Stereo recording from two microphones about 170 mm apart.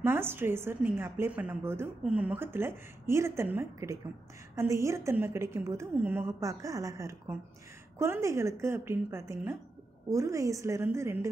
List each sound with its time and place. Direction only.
0.0 s a woman's voice: 15° right (ahead or behind)